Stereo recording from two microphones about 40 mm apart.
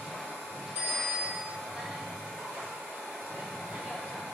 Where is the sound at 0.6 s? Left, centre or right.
Centre.